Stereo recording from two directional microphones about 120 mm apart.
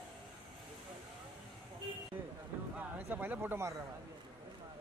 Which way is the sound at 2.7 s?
15° right (ahead or behind).